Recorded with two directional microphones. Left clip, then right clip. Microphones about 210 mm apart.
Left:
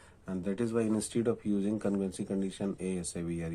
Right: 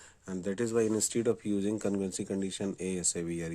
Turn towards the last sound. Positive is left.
turn(degrees=-40)  # may be behind; listen again after turning